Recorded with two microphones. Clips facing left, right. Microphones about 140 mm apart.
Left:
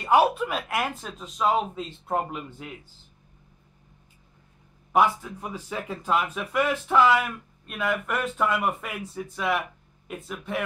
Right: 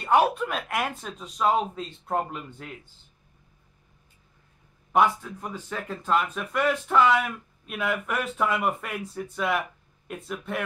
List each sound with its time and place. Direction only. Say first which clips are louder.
0.0 s speech: left 1 dB; 5° left (ahead or behind)
4.9 s speech: even; 5° left (ahead or behind)